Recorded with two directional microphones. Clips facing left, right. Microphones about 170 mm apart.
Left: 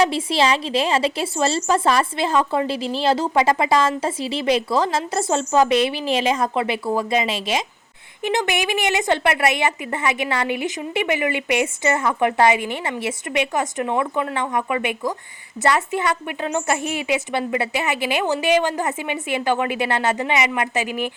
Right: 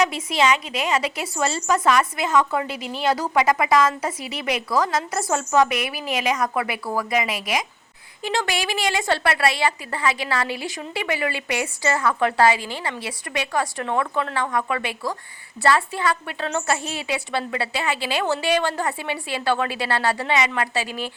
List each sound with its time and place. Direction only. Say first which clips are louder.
0.0 s a woman's voice: left 2 dB; 30° left (ahead or behind)